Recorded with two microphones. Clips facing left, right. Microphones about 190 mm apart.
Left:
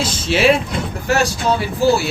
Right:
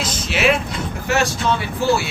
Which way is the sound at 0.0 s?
30° left (ahead or behind).